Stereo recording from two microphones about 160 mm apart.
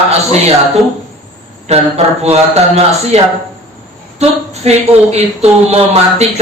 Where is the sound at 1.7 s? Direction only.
45° right (ahead or behind).